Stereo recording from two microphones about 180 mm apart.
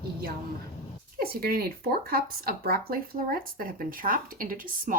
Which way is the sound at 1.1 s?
60° right (ahead or behind).